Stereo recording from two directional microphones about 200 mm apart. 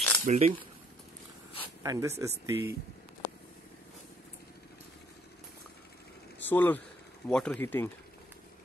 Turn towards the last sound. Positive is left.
turn(degrees=10)  # may be behind; listen again after turning